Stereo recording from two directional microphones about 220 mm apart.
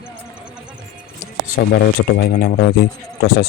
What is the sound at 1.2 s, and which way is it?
A man's voice, 45° left (ahead or behind).